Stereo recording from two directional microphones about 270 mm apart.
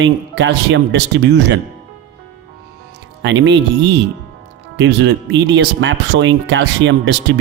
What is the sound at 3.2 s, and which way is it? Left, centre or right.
Speech, right.